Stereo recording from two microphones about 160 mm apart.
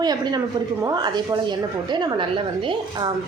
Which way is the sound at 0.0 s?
25° right (ahead or behind).